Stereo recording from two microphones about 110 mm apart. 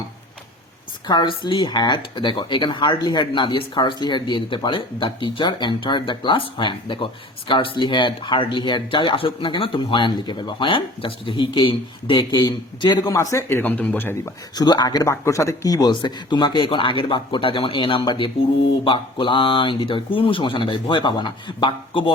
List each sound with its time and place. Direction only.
1.0 s speech: 45° left (ahead or behind); by 14.3 s 20° left (ahead or behind)
14.5 s speech: 40° left (ahead or behind)